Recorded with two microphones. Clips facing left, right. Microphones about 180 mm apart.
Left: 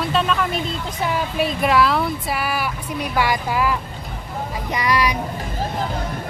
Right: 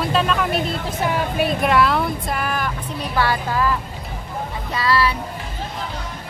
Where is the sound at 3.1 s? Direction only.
15° left (ahead or behind).